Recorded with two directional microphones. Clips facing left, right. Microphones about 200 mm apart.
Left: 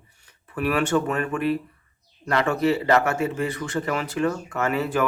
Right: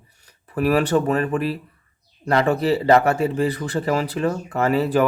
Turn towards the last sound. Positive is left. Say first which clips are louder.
# right 5 dB
turn(degrees=-35)  # may be behind; listen again after turning